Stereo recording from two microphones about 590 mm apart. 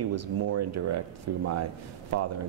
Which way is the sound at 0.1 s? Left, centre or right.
Right.